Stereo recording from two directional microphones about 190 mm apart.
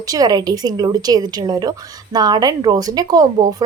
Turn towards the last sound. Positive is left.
turn(degrees=-20)  # may be behind; listen again after turning